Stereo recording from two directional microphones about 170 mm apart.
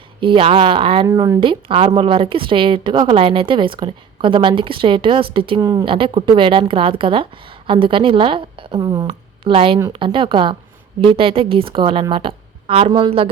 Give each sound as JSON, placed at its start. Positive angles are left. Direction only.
{"t": 0.2, "sound": "a woman's voice", "side_deg": -30}
{"t": 1.0, "sound": "a woman's voice", "side_deg": -20}